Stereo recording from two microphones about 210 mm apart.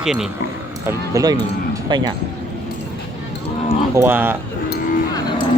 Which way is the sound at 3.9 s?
10° right (ahead or behind).